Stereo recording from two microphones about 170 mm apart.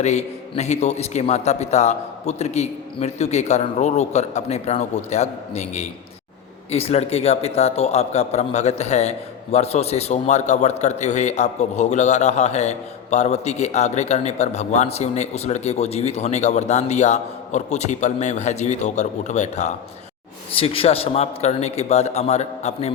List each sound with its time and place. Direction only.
0.0 s a man's voice: 40° left (ahead or behind)